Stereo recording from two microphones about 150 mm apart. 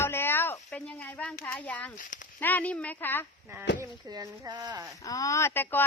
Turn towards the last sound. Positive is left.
turn(degrees=15)  # may be behind; listen again after turning